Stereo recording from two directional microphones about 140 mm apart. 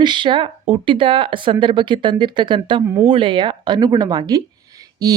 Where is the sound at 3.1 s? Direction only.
35° right (ahead or behind).